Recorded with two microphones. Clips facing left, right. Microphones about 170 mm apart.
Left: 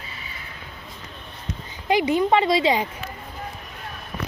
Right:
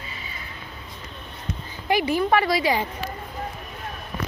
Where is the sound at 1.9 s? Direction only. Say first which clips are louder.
Left 2 dB; 20° left (ahead or behind).